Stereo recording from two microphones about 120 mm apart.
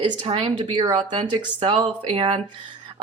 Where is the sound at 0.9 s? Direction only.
55° right (ahead or behind).